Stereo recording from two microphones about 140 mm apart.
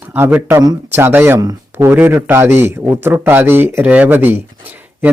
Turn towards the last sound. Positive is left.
turn(degrees=-15)  # may be behind; listen again after turning